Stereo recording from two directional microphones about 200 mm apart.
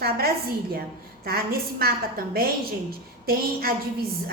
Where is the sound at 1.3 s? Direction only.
50° right (ahead or behind).